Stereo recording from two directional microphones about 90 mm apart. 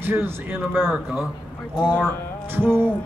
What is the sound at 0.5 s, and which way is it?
Speech, 25° right (ahead or behind).